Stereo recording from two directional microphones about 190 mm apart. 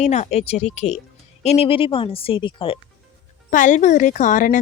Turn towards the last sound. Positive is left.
turn(degrees=40)  # may be behind; listen again after turning